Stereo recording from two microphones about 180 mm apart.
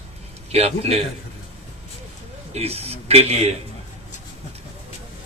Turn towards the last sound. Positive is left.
turn(degrees=-35)  # may be behind; listen again after turning